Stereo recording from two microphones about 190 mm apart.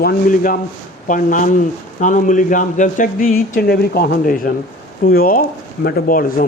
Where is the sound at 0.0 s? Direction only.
50° left (ahead or behind).